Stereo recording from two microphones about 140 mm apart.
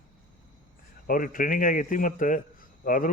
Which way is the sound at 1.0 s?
85° left.